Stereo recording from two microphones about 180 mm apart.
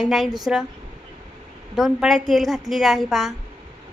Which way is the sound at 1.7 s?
Centre (ahead or behind).